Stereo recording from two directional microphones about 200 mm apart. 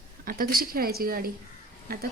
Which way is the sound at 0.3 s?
45° right (ahead or behind).